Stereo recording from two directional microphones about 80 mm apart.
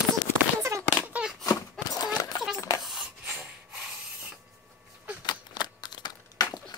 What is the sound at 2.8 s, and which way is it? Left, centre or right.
Rub, centre.